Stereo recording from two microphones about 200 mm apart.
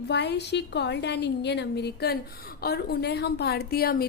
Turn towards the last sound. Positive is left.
turn(degrees=50)  # may be behind; listen again after turning